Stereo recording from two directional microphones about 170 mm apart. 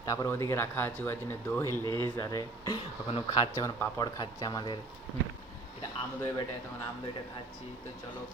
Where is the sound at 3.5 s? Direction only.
15° left (ahead or behind).